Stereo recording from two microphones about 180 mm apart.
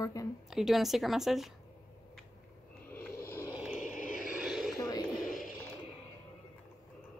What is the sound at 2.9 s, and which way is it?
Snoring, 10° left (ahead or behind).